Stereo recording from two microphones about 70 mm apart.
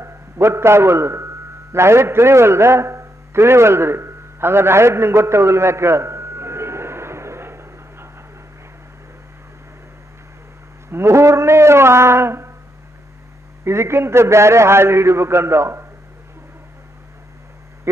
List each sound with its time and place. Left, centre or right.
0.0 s a sound: right
10.9 s a man's voice: right
13.7 s a man's voice: right